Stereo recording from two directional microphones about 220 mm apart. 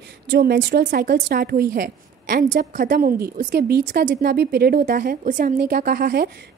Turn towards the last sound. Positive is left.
turn(degrees=-45)  # may be behind; listen again after turning